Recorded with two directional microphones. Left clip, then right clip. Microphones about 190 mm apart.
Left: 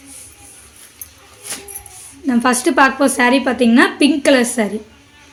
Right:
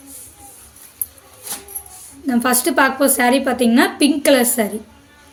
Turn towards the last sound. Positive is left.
turn(degrees=30)  # may be behind; listen again after turning